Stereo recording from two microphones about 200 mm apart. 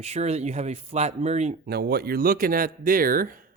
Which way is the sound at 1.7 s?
55° right (ahead or behind).